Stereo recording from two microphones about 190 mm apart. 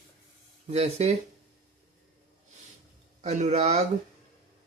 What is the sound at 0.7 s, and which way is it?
Speech, 35° right (ahead or behind).